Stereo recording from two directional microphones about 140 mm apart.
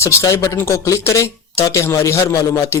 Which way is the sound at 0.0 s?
20° left (ahead or behind).